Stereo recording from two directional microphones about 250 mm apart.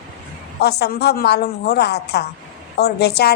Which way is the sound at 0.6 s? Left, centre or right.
Left.